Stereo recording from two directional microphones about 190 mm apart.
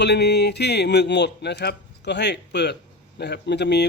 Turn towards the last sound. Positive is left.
turn(degrees=60)  # may be behind; listen again after turning